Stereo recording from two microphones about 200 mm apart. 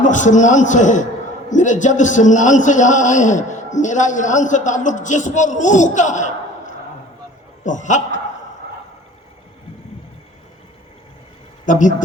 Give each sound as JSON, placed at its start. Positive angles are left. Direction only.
{"t": 0.0, "sound": "a man's voice", "side_deg": 40}
{"t": 11.6, "sound": "speech", "side_deg": 40}